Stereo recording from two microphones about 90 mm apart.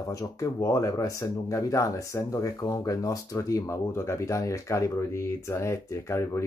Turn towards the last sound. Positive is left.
turn(degrees=30)  # may be behind; listen again after turning